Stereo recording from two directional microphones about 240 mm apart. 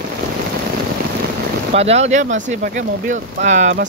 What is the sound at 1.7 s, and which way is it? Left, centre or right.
Speech, right.